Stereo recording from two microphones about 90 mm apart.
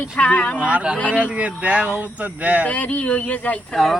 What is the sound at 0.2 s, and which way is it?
Speech, 15° left (ahead or behind).